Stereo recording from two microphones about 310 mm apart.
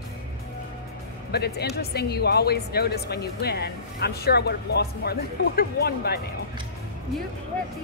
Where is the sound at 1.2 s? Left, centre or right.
Left.